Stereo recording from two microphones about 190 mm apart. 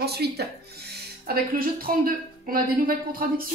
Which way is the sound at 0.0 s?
60° right (ahead or behind).